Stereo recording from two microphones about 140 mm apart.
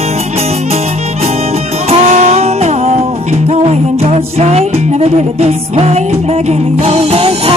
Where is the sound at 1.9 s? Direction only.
50° right (ahead or behind).